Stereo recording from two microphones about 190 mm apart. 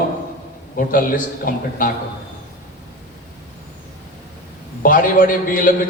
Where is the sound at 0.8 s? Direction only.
45° left (ahead or behind).